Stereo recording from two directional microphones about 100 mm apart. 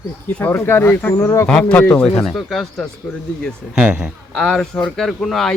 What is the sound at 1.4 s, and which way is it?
A man's voice, 10° left (ahead or behind).